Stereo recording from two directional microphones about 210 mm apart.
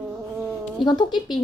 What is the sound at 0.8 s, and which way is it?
Speech, 20° left (ahead or behind).